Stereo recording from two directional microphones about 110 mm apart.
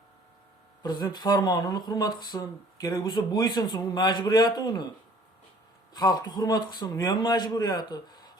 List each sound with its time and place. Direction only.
0.8 s speech: 35° left (ahead or behind)
5.9 s speech: 40° left (ahead or behind)